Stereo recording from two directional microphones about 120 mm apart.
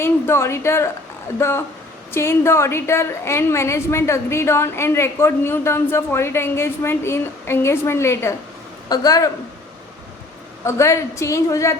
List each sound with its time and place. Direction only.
0.0 s a woman's voice: 20° left (ahead or behind)
10.6 s a woman's voice: 25° left (ahead or behind)